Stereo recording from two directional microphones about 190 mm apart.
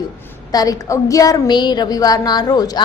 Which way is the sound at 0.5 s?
20° left (ahead or behind).